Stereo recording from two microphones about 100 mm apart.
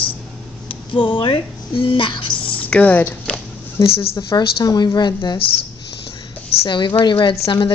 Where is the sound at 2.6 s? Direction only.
15° left (ahead or behind).